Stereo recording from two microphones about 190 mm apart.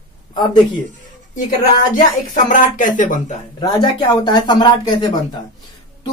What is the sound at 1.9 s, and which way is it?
Speech, 45° left (ahead or behind).